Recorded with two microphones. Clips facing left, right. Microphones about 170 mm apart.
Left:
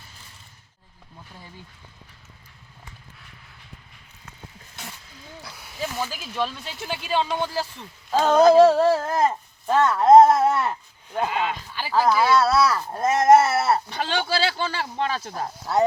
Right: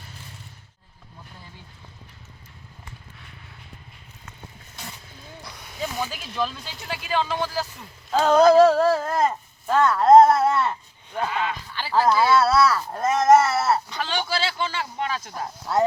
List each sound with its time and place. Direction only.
5.4 s speech: 5° left (ahead or behind)
8.7 s a sound: 20° left (ahead or behind)
9.0 s speech: 10° left (ahead or behind)
11.2 s a sound: 20° left (ahead or behind)
11.8 s speech: 10° left (ahead or behind)
13.9 s speech: 30° left (ahead or behind)